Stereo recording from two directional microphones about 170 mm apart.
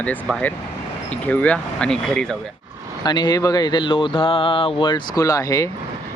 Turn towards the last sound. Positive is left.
turn(degrees=20)  # may be behind; listen again after turning